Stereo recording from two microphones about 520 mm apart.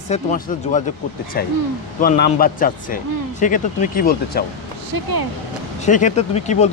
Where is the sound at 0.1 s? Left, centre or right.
Centre.